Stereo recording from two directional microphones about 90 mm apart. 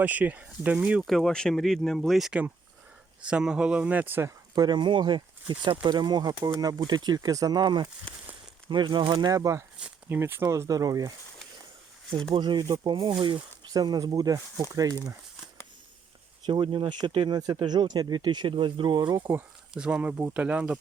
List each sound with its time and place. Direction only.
0.0 s speech: 20° right (ahead or behind)
1.0 s speech: centre (ahead or behind); by 4.3 s 20° right (ahead or behind)
4.5 s speech: 50° right (ahead or behind)
12.3 s speech: 60° right (ahead or behind)
12.8 s speech: 65° right (ahead or behind)
13.7 s speech: 45° right (ahead or behind)
16.5 s speech: 70° right (ahead or behind); by 19.3 s 50° right (ahead or behind)
19.7 s speech: 10° right (ahead or behind)